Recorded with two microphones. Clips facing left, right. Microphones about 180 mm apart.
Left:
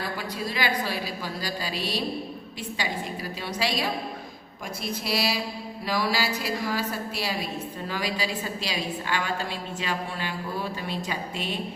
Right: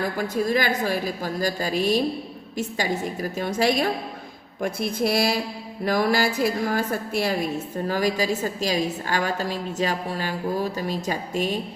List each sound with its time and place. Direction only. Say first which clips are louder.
0.0 s a woman's voice: right 7 dB; 50° right (ahead or behind)